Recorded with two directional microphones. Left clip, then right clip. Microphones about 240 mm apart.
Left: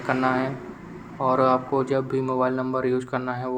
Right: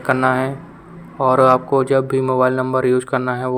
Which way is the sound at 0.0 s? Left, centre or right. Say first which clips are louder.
Right 7 dB; right.